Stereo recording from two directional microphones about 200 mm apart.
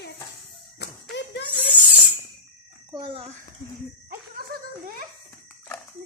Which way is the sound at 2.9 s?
25° right (ahead or behind).